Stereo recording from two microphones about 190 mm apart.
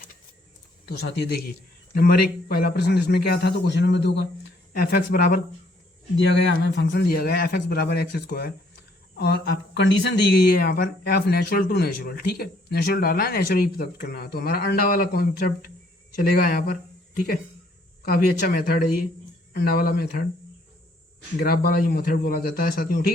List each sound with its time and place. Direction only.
0.9 s a man's voice: 60° left (ahead or behind)
4.7 s a man's voice: 50° left (ahead or behind)
6.6 s a man's voice: 65° left (ahead or behind)
18.0 s a man's voice: 50° left (ahead or behind)
21.4 s a man's voice: 50° left (ahead or behind)